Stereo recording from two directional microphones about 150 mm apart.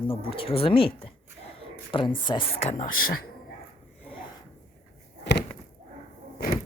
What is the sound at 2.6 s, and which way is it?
Speech, 45° left (ahead or behind).